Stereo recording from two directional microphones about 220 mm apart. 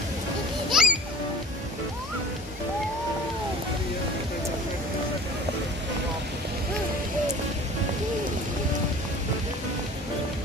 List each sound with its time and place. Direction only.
0.7 s music: 5° right (ahead or behind)